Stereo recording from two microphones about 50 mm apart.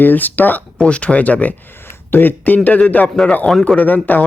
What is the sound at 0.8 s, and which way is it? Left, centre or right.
Speech, left.